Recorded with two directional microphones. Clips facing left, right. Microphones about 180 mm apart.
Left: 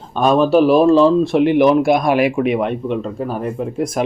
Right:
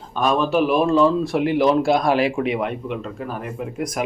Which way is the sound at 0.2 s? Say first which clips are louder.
Left 6 dB; 35° left (ahead or behind).